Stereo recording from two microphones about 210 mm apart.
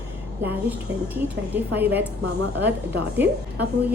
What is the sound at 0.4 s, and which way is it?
A woman's voice, 10° right (ahead or behind).